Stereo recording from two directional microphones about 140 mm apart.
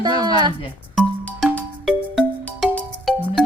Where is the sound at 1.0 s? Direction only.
Centre (ahead or behind).